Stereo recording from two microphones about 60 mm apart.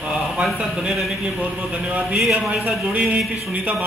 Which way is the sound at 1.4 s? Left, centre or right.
Centre.